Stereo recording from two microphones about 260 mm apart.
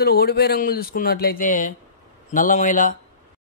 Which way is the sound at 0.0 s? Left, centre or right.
Left.